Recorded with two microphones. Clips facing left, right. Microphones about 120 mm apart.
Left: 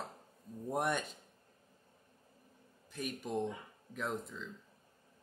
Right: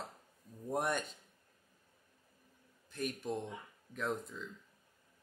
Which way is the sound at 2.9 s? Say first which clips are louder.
Right 2 dB; 5° left (ahead or behind).